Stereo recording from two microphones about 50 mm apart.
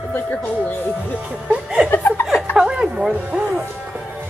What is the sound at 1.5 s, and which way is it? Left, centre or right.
A woman's voice, right.